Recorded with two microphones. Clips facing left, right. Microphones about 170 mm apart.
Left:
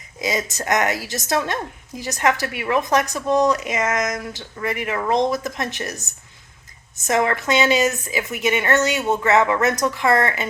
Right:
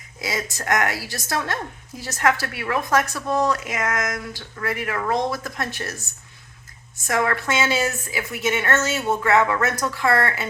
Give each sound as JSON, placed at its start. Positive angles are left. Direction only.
{"t": 0.2, "sound": "a woman's voice", "side_deg": 20}